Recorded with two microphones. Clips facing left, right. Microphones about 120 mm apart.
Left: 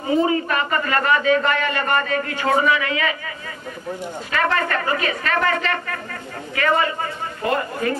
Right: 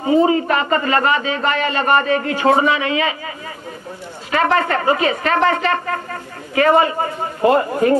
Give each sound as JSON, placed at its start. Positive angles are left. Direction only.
{"t": 0.0, "sound": "a man's voice", "side_deg": -30}
{"t": 4.3, "sound": "a man's voice", "side_deg": -25}